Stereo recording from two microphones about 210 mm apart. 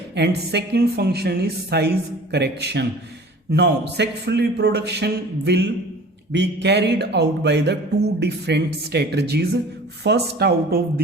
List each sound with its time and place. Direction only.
0.2 s speech: 50° right (ahead or behind)